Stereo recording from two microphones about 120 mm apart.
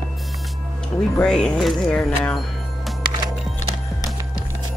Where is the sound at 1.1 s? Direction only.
5° left (ahead or behind).